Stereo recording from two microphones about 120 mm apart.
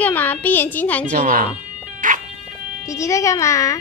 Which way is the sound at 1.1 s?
90° right.